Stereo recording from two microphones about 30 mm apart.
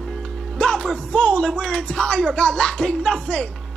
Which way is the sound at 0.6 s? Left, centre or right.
Left.